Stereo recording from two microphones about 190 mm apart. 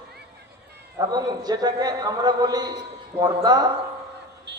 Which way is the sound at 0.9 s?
20° right (ahead or behind).